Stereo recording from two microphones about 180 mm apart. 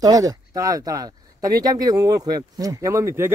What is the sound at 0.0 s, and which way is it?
Speech, 20° right (ahead or behind).